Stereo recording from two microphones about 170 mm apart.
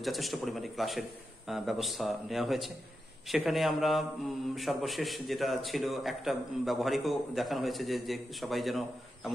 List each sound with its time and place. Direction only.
0.0 s a man's voice: centre (ahead or behind)